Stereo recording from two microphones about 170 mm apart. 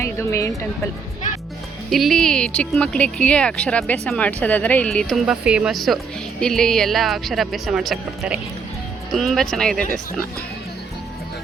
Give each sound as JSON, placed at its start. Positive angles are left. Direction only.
{"t": 0.0, "sound": "speech", "side_deg": 15}
{"t": 1.9, "sound": "speech", "side_deg": 0}